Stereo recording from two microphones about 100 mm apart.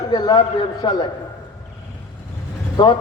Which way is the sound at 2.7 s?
45° left (ahead or behind).